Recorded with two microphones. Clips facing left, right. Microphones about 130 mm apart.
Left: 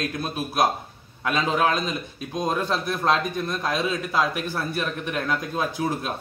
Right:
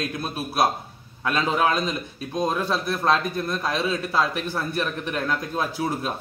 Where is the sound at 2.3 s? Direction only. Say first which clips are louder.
Right 1 dB; 5° right (ahead or behind).